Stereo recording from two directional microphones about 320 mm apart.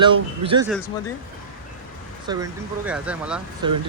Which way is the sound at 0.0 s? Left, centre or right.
Centre.